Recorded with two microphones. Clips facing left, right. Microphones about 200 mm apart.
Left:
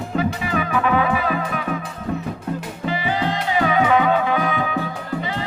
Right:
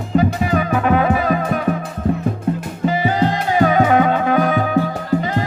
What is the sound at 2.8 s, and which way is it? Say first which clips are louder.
Music: right 6 dB; 45° right (ahead or behind).